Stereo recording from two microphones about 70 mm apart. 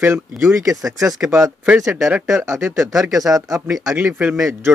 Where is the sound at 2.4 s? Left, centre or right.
Right.